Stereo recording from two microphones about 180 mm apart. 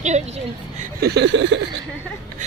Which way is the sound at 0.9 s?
65° right (ahead or behind).